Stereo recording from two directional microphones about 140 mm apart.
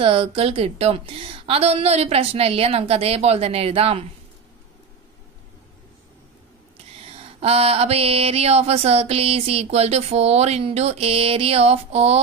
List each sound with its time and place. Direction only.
0.0 s mantra: 40° right (ahead or behind)
7.1 s mantra: 45° right (ahead or behind)